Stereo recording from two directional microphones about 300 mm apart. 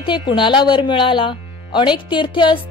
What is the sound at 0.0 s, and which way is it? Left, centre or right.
Speech, centre.